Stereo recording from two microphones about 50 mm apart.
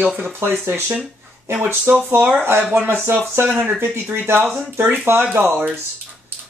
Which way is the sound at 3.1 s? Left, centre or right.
Right.